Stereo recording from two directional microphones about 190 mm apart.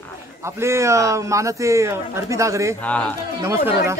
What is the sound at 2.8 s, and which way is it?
Speech, 5° left (ahead or behind).